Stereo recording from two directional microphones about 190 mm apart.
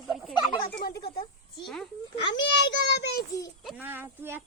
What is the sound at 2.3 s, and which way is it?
Speech, 65° left (ahead or behind).